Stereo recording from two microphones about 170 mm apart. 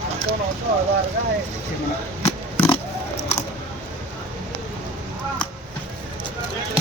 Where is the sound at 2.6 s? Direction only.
35° left (ahead or behind).